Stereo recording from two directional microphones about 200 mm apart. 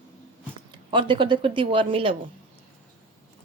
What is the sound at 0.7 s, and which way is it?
Speech, 25° right (ahead or behind).